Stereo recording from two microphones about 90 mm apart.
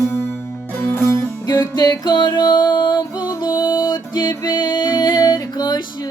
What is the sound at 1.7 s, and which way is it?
Music, 45° left (ahead or behind).